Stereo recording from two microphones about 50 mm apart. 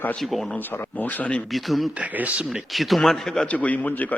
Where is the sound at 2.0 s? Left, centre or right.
Right.